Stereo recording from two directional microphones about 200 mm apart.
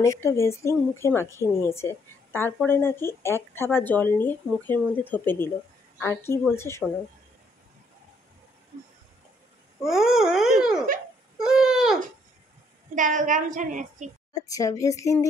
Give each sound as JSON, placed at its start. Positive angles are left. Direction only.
{"t": 0.0, "sound": "speech", "side_deg": 15}
{"t": 9.8, "sound": "a sound", "side_deg": 0}
{"t": 11.3, "sound": "baby cry", "side_deg": 0}
{"t": 12.9, "sound": "a woman's voice", "side_deg": -40}
{"t": 14.3, "sound": "speech", "side_deg": 15}